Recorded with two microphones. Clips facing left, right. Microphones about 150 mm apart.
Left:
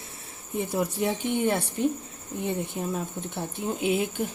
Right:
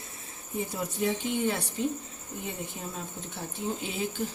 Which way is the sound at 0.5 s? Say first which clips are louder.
Left 5 dB; 65° left (ahead or behind).